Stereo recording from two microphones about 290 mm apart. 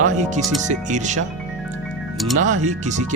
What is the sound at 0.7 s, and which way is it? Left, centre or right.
Speech, right.